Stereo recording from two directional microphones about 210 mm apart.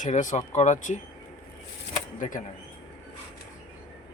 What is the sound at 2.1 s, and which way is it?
Speech, 40° left (ahead or behind).